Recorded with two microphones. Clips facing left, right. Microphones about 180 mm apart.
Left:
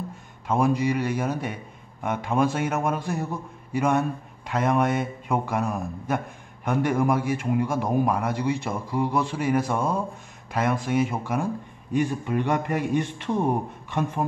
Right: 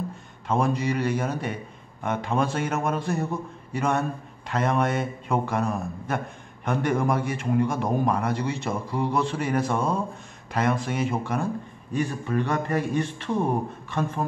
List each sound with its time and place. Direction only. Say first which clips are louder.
0.5 s a man's voice: left 2 dB; 5° left (ahead or behind)
11.9 s a man's voice: left 2 dB; 15° left (ahead or behind)